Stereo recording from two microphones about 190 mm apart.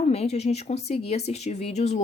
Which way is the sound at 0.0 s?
35° left (ahead or behind).